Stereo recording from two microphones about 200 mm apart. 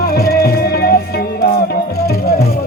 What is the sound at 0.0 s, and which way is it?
Music, 50° left (ahead or behind).